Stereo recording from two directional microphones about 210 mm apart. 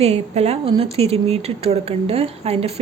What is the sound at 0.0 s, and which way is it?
Speech, 30° right (ahead or behind).